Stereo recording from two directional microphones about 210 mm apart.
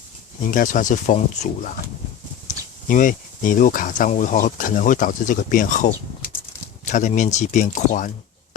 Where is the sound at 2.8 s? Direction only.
40° left (ahead or behind).